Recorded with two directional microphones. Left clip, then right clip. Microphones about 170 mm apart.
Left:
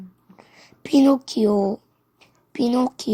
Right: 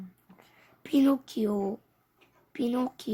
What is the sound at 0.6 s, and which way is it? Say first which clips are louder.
A woman's voice: left 8 dB; 35° left (ahead or behind).